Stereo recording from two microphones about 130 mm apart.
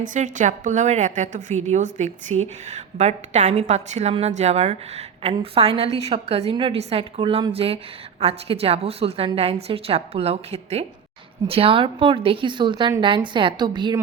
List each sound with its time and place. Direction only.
0.0 s a woman's voice: 70° right (ahead or behind); by 13.9 s 35° right (ahead or behind)